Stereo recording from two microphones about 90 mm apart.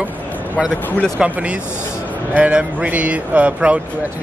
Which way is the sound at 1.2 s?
15° right (ahead or behind).